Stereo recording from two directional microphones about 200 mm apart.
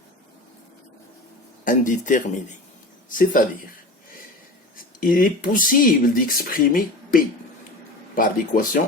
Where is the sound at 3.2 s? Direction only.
45° left (ahead or behind).